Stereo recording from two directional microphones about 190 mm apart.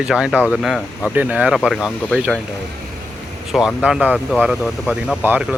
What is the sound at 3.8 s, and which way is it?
Speech, 5° right (ahead or behind).